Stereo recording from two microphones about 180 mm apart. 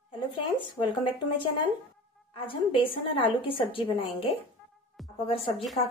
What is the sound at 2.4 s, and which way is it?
A woman's voice, 30° left (ahead or behind).